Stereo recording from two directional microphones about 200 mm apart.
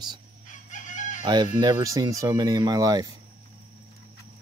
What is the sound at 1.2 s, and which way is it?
Speech, 20° right (ahead or behind).